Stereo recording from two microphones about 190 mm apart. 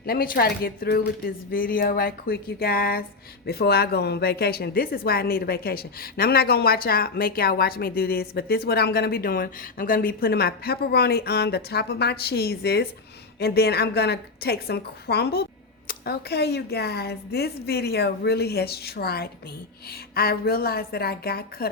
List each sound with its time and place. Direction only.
0.0 s a woman's voice: 50° left (ahead or behind)